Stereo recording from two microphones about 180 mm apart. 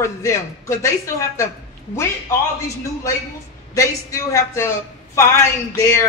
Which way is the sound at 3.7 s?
15° left (ahead or behind).